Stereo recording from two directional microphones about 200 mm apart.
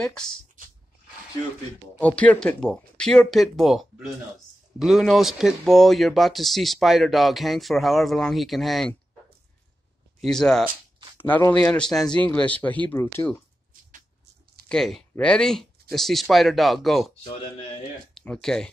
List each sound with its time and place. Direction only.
0.0 s speech: 5° left (ahead or behind)
0.6 s a sound: 40° right (ahead or behind)
2.0 s speech: 5° left (ahead or behind)
10.2 s speech: 5° left (ahead or behind)
14.7 s speech: centre (ahead or behind)
17.2 s speech: 25° left (ahead or behind)
18.1 s speech: 5° left (ahead or behind)